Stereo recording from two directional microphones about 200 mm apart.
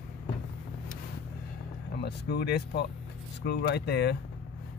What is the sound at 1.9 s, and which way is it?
Speech, 55° left (ahead or behind).